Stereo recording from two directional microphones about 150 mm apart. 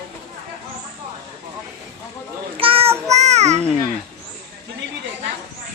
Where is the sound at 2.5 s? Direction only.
35° right (ahead or behind).